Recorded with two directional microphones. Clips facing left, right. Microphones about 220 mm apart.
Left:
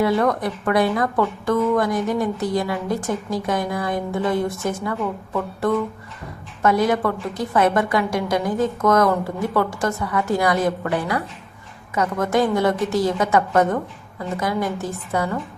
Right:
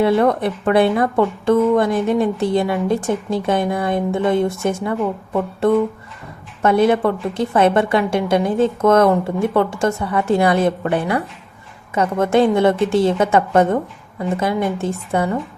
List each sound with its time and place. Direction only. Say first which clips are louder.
0.0 s a woman's voice: right 4 dB; 25° right (ahead or behind)